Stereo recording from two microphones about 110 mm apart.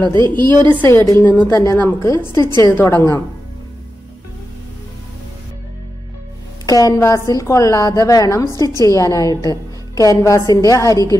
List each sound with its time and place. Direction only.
0.4 s a woman's voice: 40° right (ahead or behind)
0.8 s a woman's voice: 25° left (ahead or behind)
1.5 s a woman's voice: 25° left (ahead or behind)
6.6 s a woman's voice: 35° left (ahead or behind)